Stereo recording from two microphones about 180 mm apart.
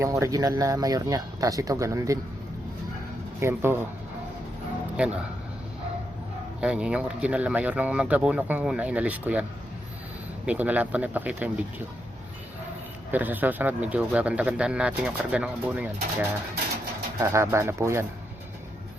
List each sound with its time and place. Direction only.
0.0 s speech: 15° right (ahead or behind)
3.4 s speech: 10° right (ahead or behind)
4.9 s speech: 5° right (ahead or behind)
6.6 s speech: 5° right (ahead or behind)
13.1 s speech: 10° right (ahead or behind)
17.2 s speech: 15° right (ahead or behind)